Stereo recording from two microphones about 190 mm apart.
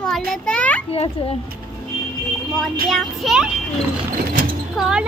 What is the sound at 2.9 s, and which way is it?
Speech, centre (ahead or behind).